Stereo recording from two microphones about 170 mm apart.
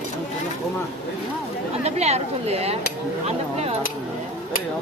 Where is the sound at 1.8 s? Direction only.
40° right (ahead or behind).